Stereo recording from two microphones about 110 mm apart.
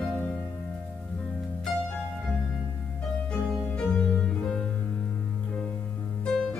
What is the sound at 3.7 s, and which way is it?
Music, 15° left (ahead or behind).